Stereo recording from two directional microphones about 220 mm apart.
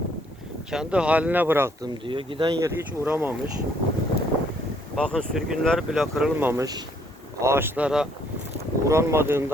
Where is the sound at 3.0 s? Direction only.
10° right (ahead or behind).